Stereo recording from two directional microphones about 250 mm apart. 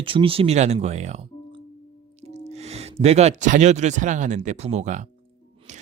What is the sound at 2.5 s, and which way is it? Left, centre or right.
Speech, right.